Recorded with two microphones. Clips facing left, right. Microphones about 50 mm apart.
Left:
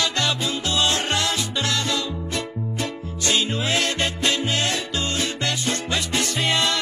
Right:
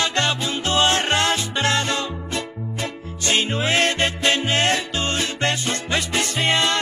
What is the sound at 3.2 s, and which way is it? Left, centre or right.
Music, right.